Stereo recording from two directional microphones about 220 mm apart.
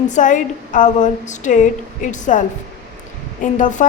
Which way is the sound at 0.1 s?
35° left (ahead or behind).